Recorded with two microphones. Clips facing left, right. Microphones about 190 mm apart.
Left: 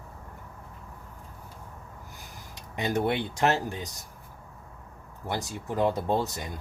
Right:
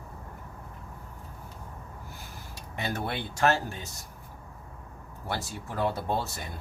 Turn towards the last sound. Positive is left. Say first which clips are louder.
# left 4 dB
turn(degrees=15)  # may be behind; listen again after turning